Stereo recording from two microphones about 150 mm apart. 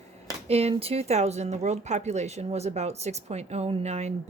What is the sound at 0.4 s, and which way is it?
Speech, 45° right (ahead or behind).